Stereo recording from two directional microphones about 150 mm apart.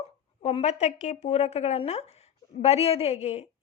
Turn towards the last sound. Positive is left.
turn(degrees=45)  # may be behind; listen again after turning